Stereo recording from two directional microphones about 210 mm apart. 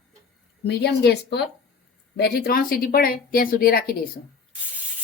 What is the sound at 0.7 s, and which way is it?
Speech, 50° left (ahead or behind).